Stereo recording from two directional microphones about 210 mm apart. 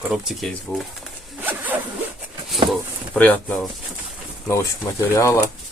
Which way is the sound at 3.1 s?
5° left (ahead or behind).